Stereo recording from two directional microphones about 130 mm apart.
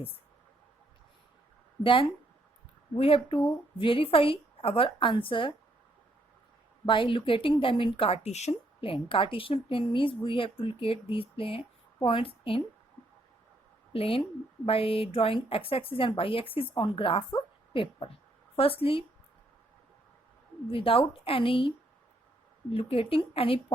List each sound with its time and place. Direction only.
1.8 s speech: 40° left (ahead or behind)
6.8 s speech: 40° left (ahead or behind)
13.9 s a woman's voice: 45° left (ahead or behind)
20.7 s speech: 45° left (ahead or behind)
22.7 s speech: 45° left (ahead or behind)